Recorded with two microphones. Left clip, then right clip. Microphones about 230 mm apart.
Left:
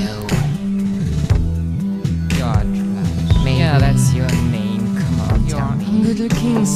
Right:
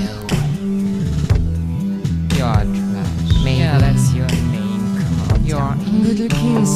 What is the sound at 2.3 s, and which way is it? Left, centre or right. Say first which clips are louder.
Music: right 2 dB; centre.